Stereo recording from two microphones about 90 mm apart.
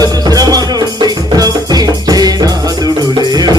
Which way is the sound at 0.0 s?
45° right (ahead or behind).